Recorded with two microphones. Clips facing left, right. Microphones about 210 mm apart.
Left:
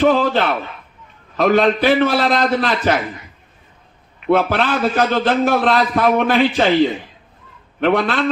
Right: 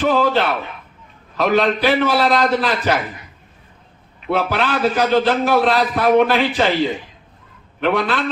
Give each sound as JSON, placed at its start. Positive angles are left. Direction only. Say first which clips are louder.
{"t": 0.0, "sound": "a man's voice", "louder": "left 2 dB", "side_deg": 50}
{"t": 4.3, "sound": "a man's voice", "louder": "left 3 dB", "side_deg": 50}
{"t": 7.8, "sound": "a man's voice", "louder": "left 2 dB", "side_deg": 50}